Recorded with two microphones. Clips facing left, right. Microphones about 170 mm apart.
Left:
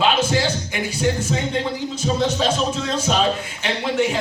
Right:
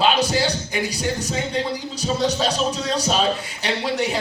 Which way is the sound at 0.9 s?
40° right (ahead or behind).